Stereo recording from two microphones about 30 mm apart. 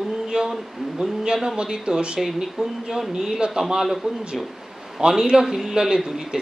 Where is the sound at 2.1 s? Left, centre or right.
Centre.